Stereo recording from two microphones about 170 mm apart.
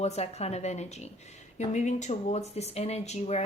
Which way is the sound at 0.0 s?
40° left (ahead or behind).